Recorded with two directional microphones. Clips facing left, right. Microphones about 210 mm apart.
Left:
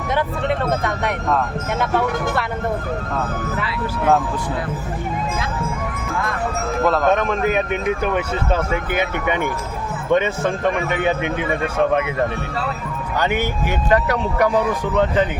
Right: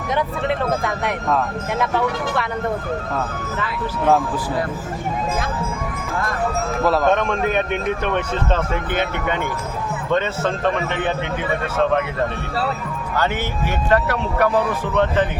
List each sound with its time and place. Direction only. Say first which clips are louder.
0.1 s speech: even; centre (ahead or behind)
6.8 s speech: even; centre (ahead or behind)
13.1 s speech: left 2 dB; 15° left (ahead or behind)